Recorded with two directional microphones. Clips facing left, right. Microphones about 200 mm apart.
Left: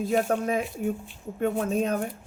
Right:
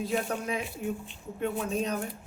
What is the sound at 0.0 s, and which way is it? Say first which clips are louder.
A woman's voice: left 6 dB; 45° left (ahead or behind).